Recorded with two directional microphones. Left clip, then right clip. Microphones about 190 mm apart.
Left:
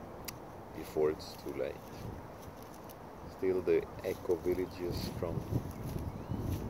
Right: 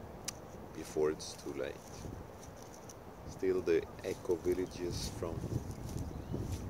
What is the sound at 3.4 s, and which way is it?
Speech, 5° right (ahead or behind).